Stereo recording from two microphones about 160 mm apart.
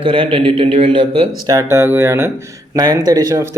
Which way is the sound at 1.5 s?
20° right (ahead or behind).